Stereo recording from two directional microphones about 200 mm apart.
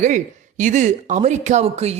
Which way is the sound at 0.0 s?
40° right (ahead or behind).